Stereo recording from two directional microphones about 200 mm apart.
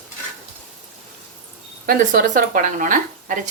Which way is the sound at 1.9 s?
45° right (ahead or behind).